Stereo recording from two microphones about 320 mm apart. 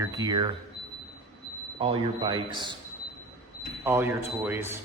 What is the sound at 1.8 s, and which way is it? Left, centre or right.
Speech, centre.